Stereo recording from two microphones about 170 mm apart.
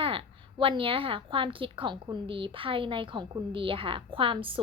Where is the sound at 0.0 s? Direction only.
30° right (ahead or behind).